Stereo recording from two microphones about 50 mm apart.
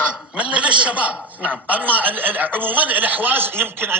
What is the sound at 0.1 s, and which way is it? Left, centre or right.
A man's voice, right.